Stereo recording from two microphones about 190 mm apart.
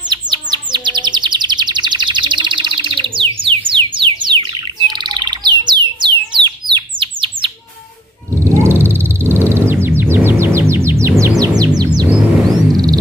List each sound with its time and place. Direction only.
0.1 s chirp: 20° right (ahead or behind)
8.4 s a sound: 15° right (ahead or behind)
12.7 s music: 20° right (ahead or behind)